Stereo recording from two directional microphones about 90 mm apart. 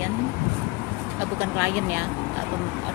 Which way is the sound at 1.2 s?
20° right (ahead or behind).